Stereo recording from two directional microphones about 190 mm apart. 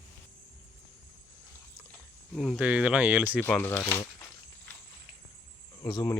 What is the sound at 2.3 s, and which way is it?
Speech, centre (ahead or behind).